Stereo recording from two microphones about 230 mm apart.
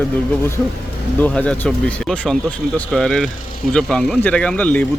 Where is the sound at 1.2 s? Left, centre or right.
Centre.